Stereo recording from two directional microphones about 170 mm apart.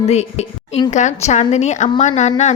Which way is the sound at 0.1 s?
40° left (ahead or behind).